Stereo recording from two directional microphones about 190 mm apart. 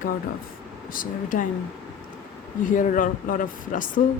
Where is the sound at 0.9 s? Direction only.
45° left (ahead or behind).